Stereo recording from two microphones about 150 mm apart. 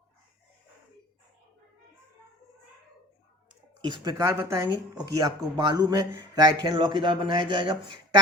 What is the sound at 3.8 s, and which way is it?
Speech, 25° right (ahead or behind).